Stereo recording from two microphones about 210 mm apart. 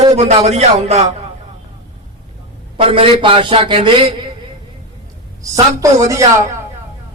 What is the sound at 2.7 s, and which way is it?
A man's voice, 25° right (ahead or behind).